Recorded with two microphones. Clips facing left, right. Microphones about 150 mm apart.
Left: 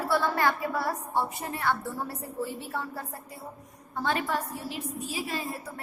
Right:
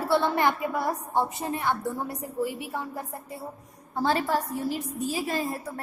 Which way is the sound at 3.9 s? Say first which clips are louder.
Right 4 dB; 35° right (ahead or behind).